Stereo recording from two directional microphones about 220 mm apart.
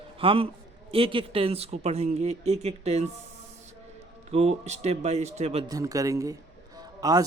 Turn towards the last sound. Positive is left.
turn(degrees=-15)  # may be behind; listen again after turning